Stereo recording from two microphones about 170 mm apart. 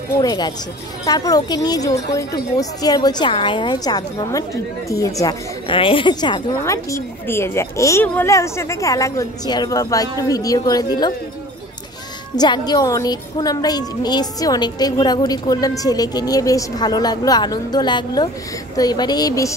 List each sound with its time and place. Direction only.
0.2 s a woman's voice: 25° left (ahead or behind)
5.2 s a woman's voice: 30° left (ahead or behind)
6.6 s a woman's voice: 15° left (ahead or behind)
12.4 s a woman's voice: 25° left (ahead or behind)